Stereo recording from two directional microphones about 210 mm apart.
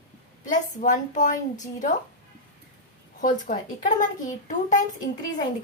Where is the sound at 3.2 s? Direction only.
40° left (ahead or behind).